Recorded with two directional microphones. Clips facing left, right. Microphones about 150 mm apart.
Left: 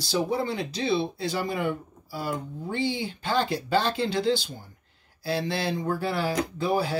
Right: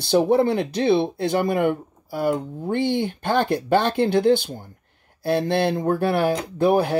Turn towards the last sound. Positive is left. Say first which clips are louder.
# right 7 dB
turn(degrees=-60)  # may be behind; listen again after turning